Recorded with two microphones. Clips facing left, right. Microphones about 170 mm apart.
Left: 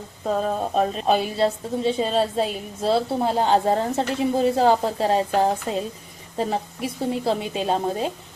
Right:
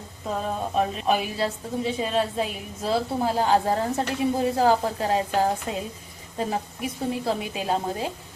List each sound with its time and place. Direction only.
0.8 s a woman's voice: 30° left (ahead or behind)